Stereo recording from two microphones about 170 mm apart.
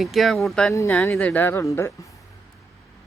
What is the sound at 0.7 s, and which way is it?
Speech, 20° left (ahead or behind).